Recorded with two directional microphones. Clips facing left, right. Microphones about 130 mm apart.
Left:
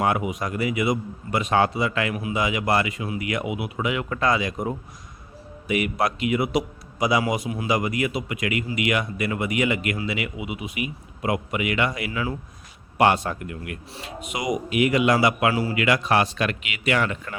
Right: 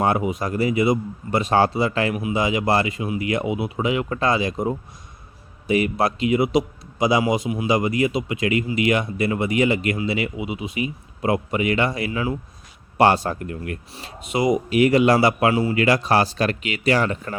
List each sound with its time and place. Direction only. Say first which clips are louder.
0.0 s a man's voice: right 3 dB; 30° right (ahead or behind)